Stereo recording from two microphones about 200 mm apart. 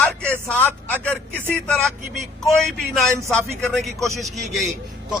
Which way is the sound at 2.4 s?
Centre (ahead or behind).